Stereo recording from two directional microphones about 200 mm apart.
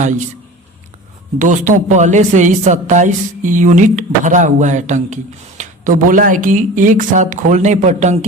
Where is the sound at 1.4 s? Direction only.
40° right (ahead or behind).